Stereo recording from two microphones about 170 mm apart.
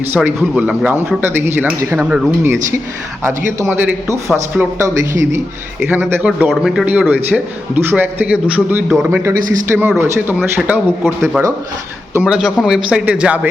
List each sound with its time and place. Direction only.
0.3 s a man's voice: 5° right (ahead or behind)
3.6 s a man's voice: 10° right (ahead or behind)